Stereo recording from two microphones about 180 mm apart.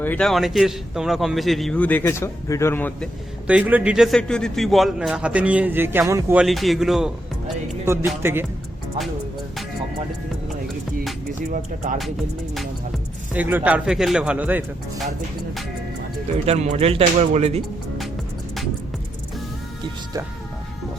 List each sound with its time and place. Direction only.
0.0 s a man's voice: 5° left (ahead or behind)
3.4 s a man's voice: 10° right (ahead or behind)
6.4 s a man's voice: centre (ahead or behind)
7.9 s a man's voice: 10° right (ahead or behind)
11.5 s speech: 45° right (ahead or behind)
13.3 s a man's voice: 10° right (ahead or behind)
16.5 s speech: 35° right (ahead or behind)